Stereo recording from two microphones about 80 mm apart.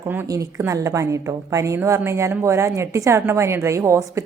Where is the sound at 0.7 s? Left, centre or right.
Right.